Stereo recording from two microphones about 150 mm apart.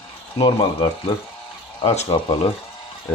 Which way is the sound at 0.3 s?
30° left (ahead or behind).